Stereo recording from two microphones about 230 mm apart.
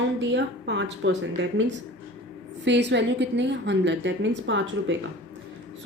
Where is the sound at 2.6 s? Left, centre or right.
Right.